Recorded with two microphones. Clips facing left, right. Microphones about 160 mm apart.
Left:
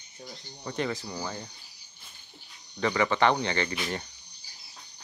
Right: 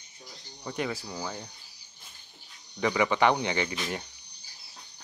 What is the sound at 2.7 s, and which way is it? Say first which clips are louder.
Speech: even; 10° right (ahead or behind).